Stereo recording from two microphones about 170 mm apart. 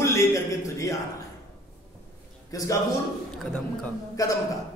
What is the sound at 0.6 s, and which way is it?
Speech, 20° left (ahead or behind).